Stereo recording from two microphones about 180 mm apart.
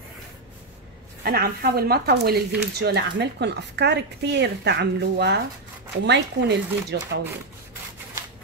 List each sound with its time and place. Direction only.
1.2 s speech: 55° right (ahead or behind)